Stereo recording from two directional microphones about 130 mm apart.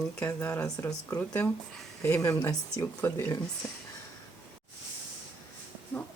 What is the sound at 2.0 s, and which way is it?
Speech, 20° left (ahead or behind).